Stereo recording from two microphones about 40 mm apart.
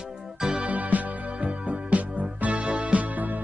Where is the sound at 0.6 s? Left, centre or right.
Right.